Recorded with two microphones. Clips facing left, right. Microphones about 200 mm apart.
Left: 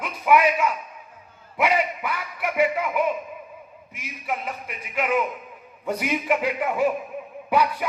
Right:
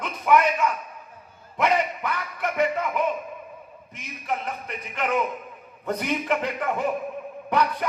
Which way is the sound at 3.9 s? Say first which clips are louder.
Even; 10° left (ahead or behind).